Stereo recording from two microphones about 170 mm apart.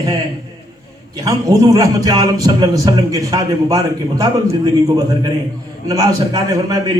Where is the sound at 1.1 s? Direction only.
20° right (ahead or behind).